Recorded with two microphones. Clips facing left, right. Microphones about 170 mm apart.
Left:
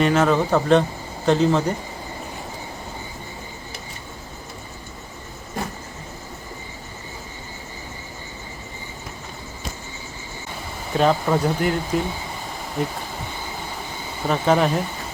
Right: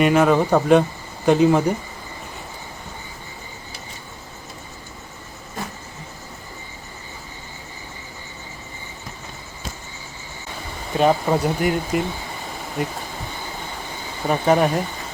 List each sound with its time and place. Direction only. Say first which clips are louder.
0.0 s speech: right 2 dB; 10° right (ahead or behind)
10.9 s speech: right 1 dB; 5° right (ahead or behind)
14.3 s speech: right 1 dB; 5° right (ahead or behind)